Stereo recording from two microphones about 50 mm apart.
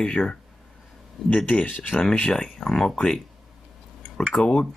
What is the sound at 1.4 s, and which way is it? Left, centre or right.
Speech, left.